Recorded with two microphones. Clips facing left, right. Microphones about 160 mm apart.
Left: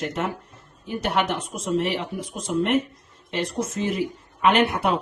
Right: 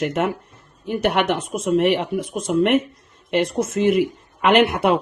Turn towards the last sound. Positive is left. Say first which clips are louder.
# right 4 dB
turn(degrees=-65)  # may be behind; listen again after turning